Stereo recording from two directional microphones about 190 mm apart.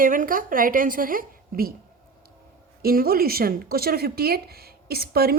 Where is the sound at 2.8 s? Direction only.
50° right (ahead or behind).